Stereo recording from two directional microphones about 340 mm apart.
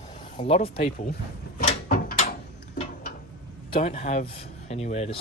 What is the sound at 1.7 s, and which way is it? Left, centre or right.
Mechanisms, left.